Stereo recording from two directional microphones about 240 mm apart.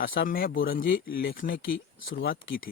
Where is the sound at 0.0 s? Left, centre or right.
Left.